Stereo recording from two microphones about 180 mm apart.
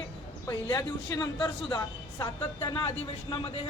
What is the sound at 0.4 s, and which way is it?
Speech, 20° left (ahead or behind).